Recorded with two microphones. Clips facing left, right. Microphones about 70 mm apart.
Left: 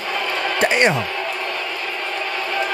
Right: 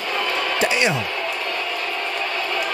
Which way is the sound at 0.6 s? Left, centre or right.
Left.